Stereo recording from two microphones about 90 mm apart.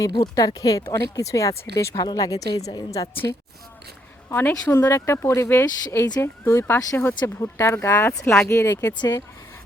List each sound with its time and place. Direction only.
0.0 s a woman's voice: 40° left (ahead or behind)
4.3 s a woman's voice: 25° left (ahead or behind); by 9.2 s 45° left (ahead or behind)